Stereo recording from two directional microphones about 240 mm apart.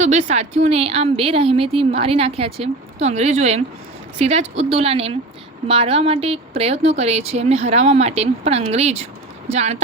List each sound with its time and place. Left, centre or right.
0.0 s a woman's voice: right